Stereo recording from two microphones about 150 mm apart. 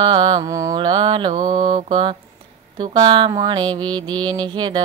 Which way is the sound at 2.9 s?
30° right (ahead or behind).